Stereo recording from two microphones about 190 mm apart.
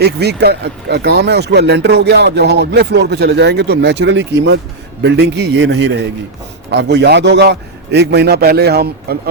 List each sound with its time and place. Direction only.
0.0 s speech: 60° right (ahead or behind)